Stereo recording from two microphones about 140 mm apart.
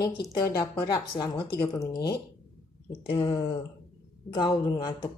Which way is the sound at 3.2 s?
25° left (ahead or behind).